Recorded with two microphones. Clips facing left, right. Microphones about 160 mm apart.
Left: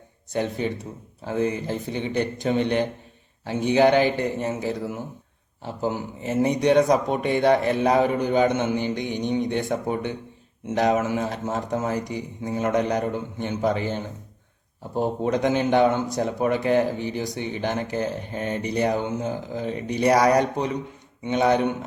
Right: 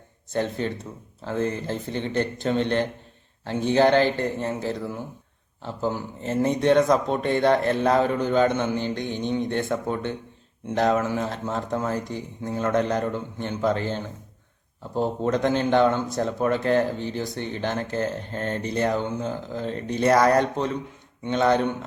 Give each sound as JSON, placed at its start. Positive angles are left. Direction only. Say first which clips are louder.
{"t": 0.3, "sound": "speech", "louder": "left 1 dB", "side_deg": 15}